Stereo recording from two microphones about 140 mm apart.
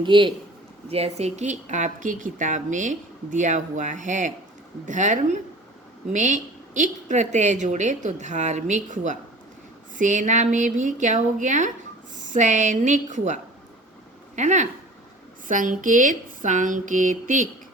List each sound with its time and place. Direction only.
0.0 s a man's voice: 35° right (ahead or behind)
0.9 s speech: 45° right (ahead or behind)
15.4 s speech: 70° right (ahead or behind)